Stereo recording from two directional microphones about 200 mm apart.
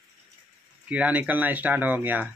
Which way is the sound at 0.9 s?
5° right (ahead or behind).